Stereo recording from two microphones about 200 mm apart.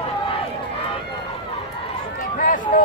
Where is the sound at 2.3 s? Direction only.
40° left (ahead or behind).